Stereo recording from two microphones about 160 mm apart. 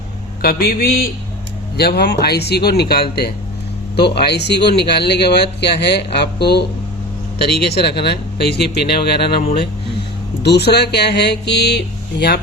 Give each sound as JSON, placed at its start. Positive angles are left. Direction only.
{"t": 0.4, "sound": "a man's voice", "side_deg": 70}
{"t": 1.7, "sound": "speech", "side_deg": 85}
{"t": 3.9, "sound": "a man's voice", "side_deg": 90}
{"t": 10.4, "sound": "a man's voice", "side_deg": 90}